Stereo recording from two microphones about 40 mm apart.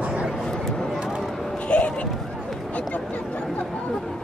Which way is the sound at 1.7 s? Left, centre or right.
Left.